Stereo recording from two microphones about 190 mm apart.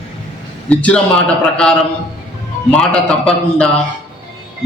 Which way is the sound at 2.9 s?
5° left (ahead or behind).